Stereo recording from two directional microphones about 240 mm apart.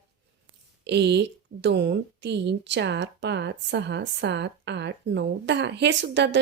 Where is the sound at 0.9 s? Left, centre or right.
Right.